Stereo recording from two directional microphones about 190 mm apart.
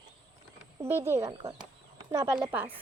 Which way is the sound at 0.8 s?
15° right (ahead or behind).